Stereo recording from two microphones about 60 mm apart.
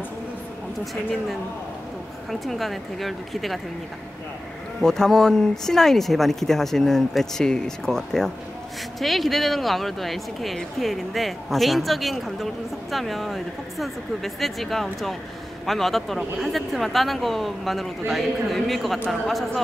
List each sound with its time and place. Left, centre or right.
2.4 s speech: centre
4.8 s speech: centre